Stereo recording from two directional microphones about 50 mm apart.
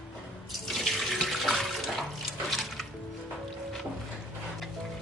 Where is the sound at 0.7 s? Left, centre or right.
Centre.